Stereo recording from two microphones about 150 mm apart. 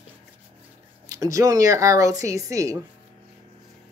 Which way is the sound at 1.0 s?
20° right (ahead or behind).